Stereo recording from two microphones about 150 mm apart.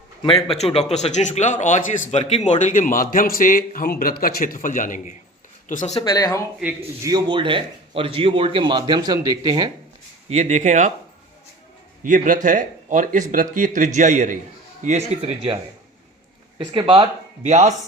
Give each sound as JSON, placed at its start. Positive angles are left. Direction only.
{"t": 0.4, "sound": "a man's voice", "side_deg": 45}
{"t": 6.0, "sound": "speech", "side_deg": 25}
{"t": 6.6, "sound": "speech", "side_deg": -15}
{"t": 7.1, "sound": "speech", "side_deg": -35}
{"t": 10.2, "sound": "speech", "side_deg": -50}
{"t": 12.0, "sound": "speech", "side_deg": -60}
{"t": 16.7, "sound": "speech", "side_deg": -35}
{"t": 17.4, "sound": "speech", "side_deg": -50}